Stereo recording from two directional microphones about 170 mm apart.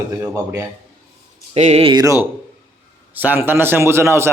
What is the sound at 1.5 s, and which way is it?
Speech, 40° right (ahead or behind).